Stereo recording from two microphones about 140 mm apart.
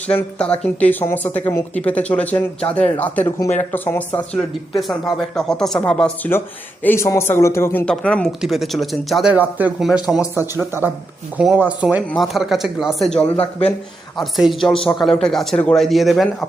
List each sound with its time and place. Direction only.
0.2 s speech: 10° left (ahead or behind)
4.8 s a man's voice: centre (ahead or behind)
6.8 s a man's voice: 20° left (ahead or behind); by 10.2 s 5° right (ahead or behind)
10.7 s speech: 15° right (ahead or behind)
12.1 s a man's voice: centre (ahead or behind)